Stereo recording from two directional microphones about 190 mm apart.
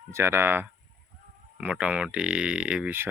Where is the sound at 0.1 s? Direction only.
15° right (ahead or behind).